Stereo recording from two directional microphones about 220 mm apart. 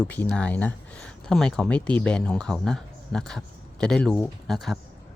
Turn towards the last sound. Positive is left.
turn(degrees=0)  # may be behind; listen again after turning